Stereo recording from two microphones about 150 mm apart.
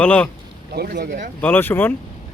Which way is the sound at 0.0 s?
10° left (ahead or behind).